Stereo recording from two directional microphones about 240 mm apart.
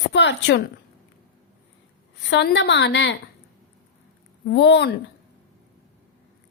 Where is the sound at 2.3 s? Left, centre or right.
Left.